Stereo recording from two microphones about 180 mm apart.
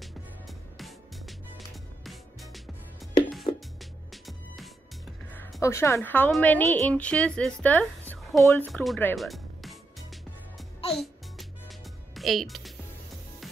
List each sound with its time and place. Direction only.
0.0 s music: centre (ahead or behind)
3.5 s music: 30° left (ahead or behind)
4.1 s music: centre (ahead or behind)
5.6 s a woman's voice: 15° left (ahead or behind); by 8.5 s centre (ahead or behind)
8.5 s music: 10° left (ahead or behind)